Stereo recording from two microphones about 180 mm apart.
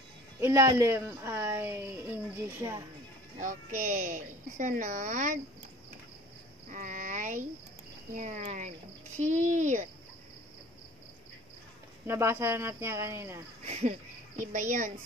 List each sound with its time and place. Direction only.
0.4 s speech: 15° right (ahead or behind)
3.3 s a woman's voice: 45° right (ahead or behind)
6.7 s a sound: 45° right (ahead or behind)
8.1 s a woman's voice: 45° right (ahead or behind)
12.1 s speech: 15° right (ahead or behind)
13.7 s a woman's voice: 35° right (ahead or behind)